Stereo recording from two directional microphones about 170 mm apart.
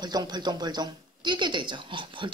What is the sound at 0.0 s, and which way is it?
A woman's voice, 25° right (ahead or behind).